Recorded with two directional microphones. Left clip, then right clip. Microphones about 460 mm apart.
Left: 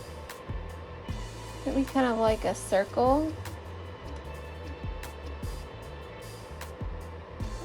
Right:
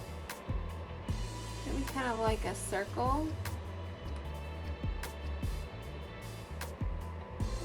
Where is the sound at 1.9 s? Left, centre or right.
Centre.